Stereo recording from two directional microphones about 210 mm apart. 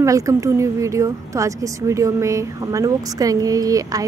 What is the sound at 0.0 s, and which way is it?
A woman's voice, 15° right (ahead or behind).